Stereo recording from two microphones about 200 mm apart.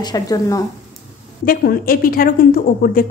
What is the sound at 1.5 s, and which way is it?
A woman's voice, 45° left (ahead or behind).